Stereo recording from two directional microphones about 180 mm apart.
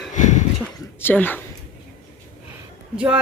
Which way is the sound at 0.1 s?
40° left (ahead or behind).